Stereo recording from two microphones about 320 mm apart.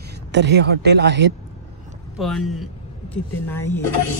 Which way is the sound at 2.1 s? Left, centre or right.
Centre.